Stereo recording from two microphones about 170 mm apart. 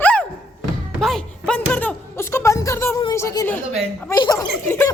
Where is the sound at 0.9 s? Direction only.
Centre (ahead or behind).